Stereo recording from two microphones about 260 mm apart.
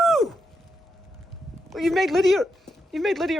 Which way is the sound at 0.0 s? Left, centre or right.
Centre.